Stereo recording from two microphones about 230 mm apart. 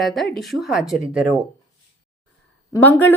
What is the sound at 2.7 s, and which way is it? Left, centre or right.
Speech, centre.